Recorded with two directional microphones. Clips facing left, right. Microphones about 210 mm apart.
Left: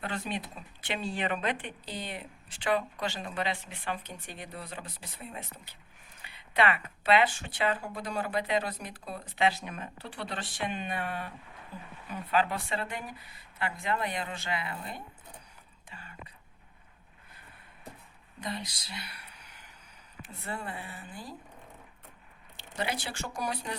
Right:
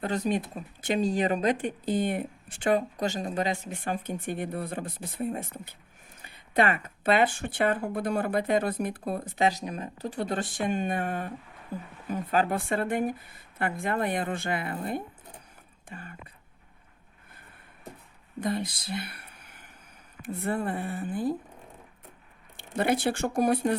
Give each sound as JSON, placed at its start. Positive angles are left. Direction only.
{"t": 0.0, "sound": "speech", "side_deg": -40}
{"t": 18.3, "sound": "speech", "side_deg": -50}
{"t": 22.5, "sound": "speech", "side_deg": -55}